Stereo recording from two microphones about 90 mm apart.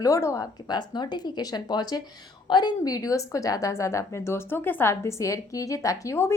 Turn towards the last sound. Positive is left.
turn(degrees=35)  # may be behind; listen again after turning